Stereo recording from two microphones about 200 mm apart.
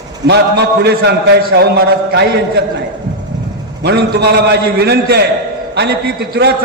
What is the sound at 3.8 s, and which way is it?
A man's voice, 55° right (ahead or behind).